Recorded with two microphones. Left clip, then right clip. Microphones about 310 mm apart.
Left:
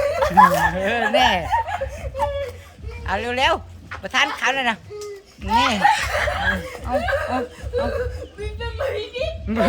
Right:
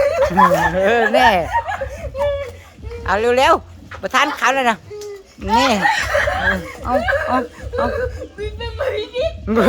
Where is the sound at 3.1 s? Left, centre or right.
Centre.